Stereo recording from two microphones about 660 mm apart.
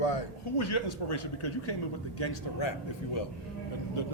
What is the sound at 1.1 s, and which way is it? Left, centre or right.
Speech, left.